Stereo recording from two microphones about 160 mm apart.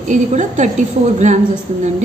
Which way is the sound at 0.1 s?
50° right (ahead or behind).